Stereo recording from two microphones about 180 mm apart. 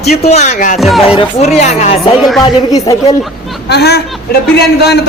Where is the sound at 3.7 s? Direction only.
65° left (ahead or behind).